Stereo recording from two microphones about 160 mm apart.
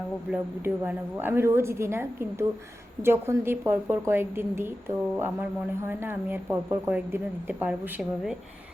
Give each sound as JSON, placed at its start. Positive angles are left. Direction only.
{"t": 0.3, "sound": "speech", "side_deg": -10}